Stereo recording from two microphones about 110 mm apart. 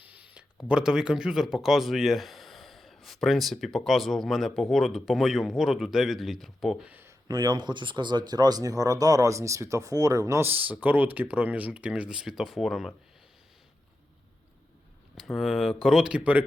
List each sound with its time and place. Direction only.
0.0 s speech: 15° right (ahead or behind); by 6.7 s centre (ahead or behind)
6.8 s speech: 15° right (ahead or behind)
7.3 s speech: 35° right (ahead or behind); by 12.9 s centre (ahead or behind)
15.1 s speech: centre (ahead or behind)